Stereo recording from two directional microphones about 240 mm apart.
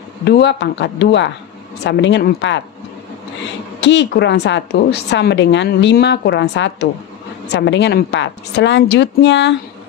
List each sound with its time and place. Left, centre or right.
0.2 s a woman's voice: left
3.8 s a woman's voice: left